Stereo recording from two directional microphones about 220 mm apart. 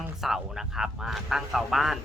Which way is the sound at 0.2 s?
Centre (ahead or behind).